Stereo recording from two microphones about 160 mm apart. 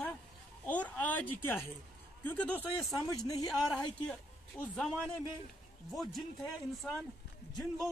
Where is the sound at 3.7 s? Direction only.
5° left (ahead or behind).